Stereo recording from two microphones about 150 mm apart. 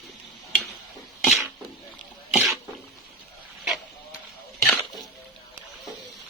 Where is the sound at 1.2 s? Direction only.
Centre (ahead or behind).